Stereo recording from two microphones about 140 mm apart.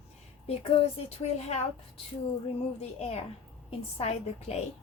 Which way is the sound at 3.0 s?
45° left (ahead or behind).